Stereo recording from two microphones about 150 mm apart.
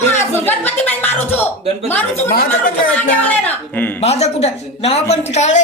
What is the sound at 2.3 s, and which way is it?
Speech, 80° left.